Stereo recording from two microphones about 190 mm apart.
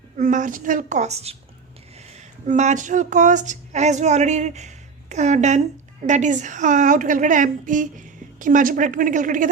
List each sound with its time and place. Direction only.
0.2 s speech: 40° right (ahead or behind)
2.5 s a woman's voice: 40° right (ahead or behind)